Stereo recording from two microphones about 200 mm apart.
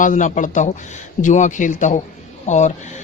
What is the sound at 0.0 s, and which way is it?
Speech, 40° left (ahead or behind).